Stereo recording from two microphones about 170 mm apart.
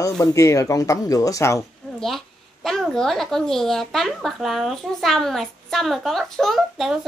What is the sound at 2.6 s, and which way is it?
Speech, centre (ahead or behind).